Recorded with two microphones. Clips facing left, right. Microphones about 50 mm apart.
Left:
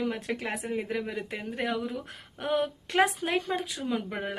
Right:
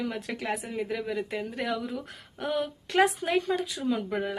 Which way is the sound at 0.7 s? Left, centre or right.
Left.